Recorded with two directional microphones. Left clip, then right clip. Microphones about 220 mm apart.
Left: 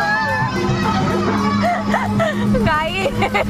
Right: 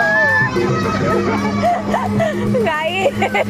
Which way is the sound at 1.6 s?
Centre (ahead or behind).